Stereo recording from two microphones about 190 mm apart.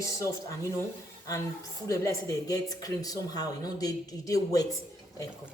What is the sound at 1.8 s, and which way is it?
Speech, 15° left (ahead or behind).